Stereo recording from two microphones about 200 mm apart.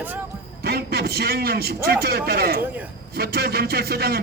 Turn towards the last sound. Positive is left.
turn(degrees=-50)  # may be behind; listen again after turning